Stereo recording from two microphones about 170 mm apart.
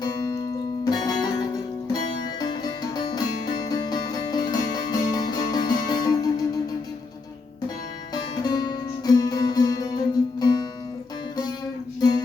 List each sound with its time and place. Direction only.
0.0 s music: 25° left (ahead or behind)
8.1 s music: 25° left (ahead or behind)
11.9 s music: 20° left (ahead or behind)